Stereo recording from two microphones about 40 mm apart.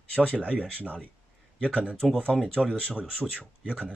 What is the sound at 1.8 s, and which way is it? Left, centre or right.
Speech, left.